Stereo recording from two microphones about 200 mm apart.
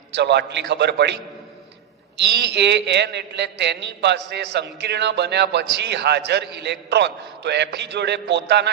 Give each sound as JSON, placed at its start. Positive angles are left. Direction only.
{"t": 0.1, "sound": "a man's voice", "side_deg": -60}